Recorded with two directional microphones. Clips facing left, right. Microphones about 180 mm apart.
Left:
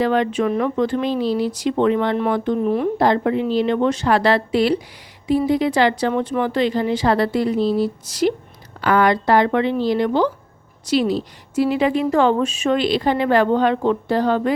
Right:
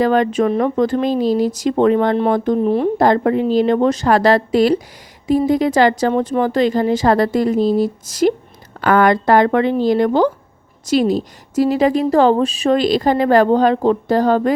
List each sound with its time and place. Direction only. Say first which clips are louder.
0.0 s a woman's voice: right 4 dB; 45° right (ahead or behind)
3.0 s a woman's voice: right 4 dB; 45° right (ahead or behind)